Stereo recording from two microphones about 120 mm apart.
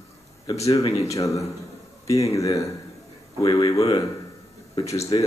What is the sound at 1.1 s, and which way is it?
Speech, 25° left (ahead or behind).